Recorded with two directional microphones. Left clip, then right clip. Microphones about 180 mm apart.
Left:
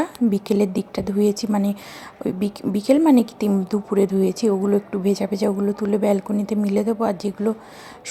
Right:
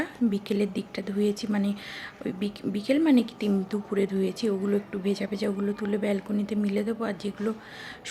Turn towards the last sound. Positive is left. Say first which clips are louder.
# left 9 dB
turn(degrees=25)  # may be behind; listen again after turning